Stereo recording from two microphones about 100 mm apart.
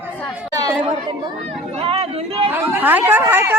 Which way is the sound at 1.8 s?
70° right (ahead or behind).